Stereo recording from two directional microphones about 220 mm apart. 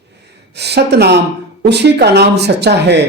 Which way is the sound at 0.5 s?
50° right (ahead or behind).